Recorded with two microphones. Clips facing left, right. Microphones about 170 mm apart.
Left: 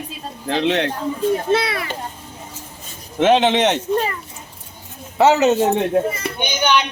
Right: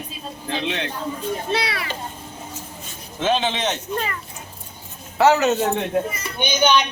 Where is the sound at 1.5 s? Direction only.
50° left (ahead or behind).